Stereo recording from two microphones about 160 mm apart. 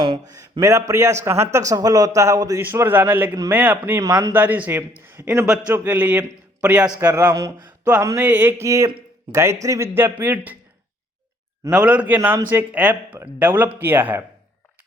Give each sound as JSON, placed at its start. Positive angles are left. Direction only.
{"t": 0.6, "sound": "a man's voice", "side_deg": -20}
{"t": 7.3, "sound": "speech", "side_deg": -25}
{"t": 11.7, "sound": "speech", "side_deg": -10}